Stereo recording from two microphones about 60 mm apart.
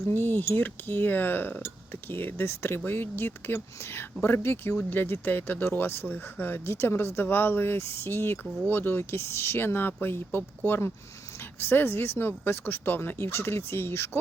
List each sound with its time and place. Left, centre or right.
0.1 s speech: left